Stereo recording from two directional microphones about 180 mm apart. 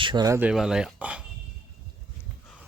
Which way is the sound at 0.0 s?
25° right (ahead or behind).